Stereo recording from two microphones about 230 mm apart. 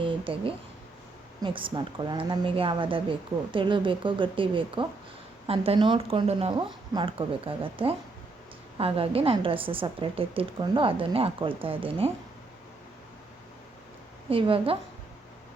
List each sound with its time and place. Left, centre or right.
0.0 s a woman's voice: right
14.3 s a woman's voice: right